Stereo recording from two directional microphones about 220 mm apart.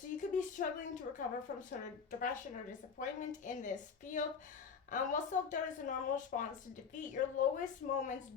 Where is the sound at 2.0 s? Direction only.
35° left (ahead or behind).